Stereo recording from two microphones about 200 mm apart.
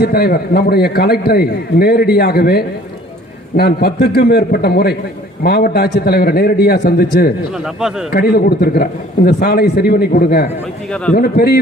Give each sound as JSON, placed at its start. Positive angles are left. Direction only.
{"t": 0.0, "sound": "a man's voice", "side_deg": 50}